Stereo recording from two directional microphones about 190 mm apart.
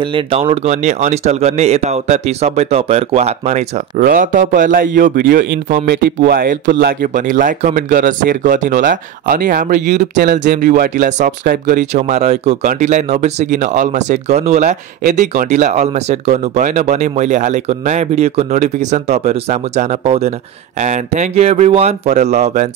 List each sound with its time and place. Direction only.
0.0 s speech: 30° right (ahead or behind)
11.4 s speech: 55° right (ahead or behind)
11.9 s speech: 35° right (ahead or behind)